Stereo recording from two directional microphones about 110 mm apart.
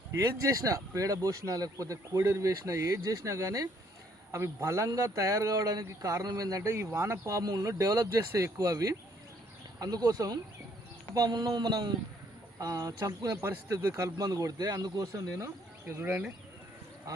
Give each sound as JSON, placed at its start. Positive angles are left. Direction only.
{"t": 0.1, "sound": "a man's voice", "side_deg": -30}